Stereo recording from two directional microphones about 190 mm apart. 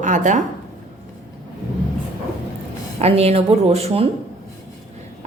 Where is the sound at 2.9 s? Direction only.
35° right (ahead or behind).